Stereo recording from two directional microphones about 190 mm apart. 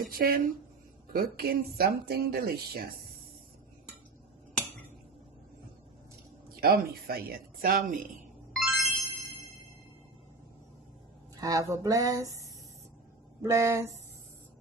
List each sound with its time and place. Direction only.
0.0 s speech: 50° right (ahead or behind)
6.5 s speech: 55° right (ahead or behind)
8.5 s music: centre (ahead or behind)
11.3 s speech: 20° right (ahead or behind)
13.4 s speech: 15° right (ahead or behind)